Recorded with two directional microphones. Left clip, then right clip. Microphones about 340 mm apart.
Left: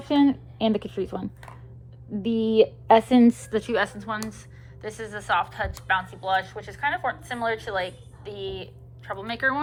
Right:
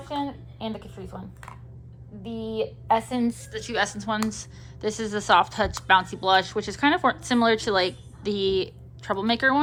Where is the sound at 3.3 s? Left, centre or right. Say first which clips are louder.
Left 5 dB; centre.